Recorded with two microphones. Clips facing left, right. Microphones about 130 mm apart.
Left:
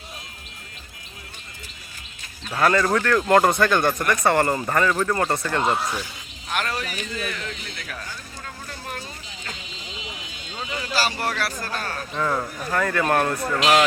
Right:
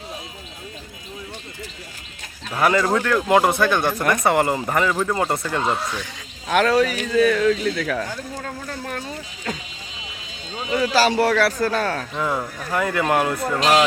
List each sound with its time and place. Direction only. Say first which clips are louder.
2.6 s speech: right 1 dB; 5° right (ahead or behind)
5.7 s speech: even; 10° left (ahead or behind)
6.5 s speech: right 10 dB; 90° right
10.8 s speech: right 9 dB; 90° right
12.1 s speech: right 1 dB; 10° right (ahead or behind)